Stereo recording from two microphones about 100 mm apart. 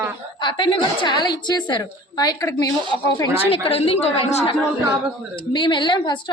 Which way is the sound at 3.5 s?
75° left (ahead or behind).